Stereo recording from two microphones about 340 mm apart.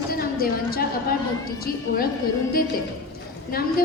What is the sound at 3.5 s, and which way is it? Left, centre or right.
Speech, left.